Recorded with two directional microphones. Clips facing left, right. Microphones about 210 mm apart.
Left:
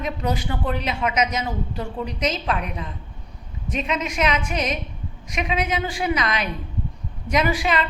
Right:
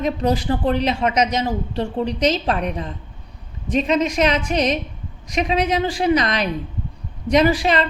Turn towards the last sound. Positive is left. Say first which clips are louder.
# right 5 dB
turn(degrees=-35)  # may be behind; listen again after turning